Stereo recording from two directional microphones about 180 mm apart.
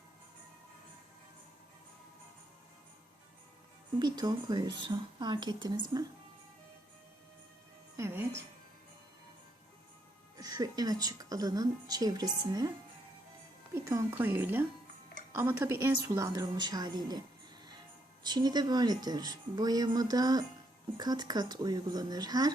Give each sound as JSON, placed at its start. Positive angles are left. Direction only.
{"t": 4.0, "sound": "a woman's voice", "side_deg": -20}
{"t": 7.9, "sound": "speech", "side_deg": -15}
{"t": 10.3, "sound": "a woman's voice", "side_deg": -20}
{"t": 13.7, "sound": "a woman's voice", "side_deg": -15}